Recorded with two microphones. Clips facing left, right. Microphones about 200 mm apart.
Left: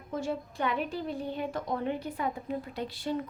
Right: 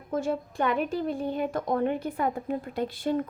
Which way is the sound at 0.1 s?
50° right (ahead or behind).